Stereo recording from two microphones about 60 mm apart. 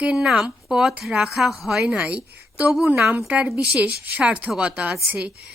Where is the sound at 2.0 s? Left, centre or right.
Right.